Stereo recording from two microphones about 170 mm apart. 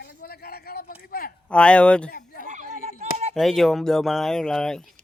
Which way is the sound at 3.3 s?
Centre (ahead or behind).